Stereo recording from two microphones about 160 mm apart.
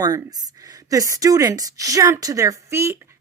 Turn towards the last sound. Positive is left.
turn(degrees=-15)  # may be behind; listen again after turning